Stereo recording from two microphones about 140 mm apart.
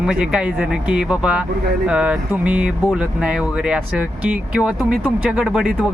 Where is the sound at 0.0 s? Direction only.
5° right (ahead or behind).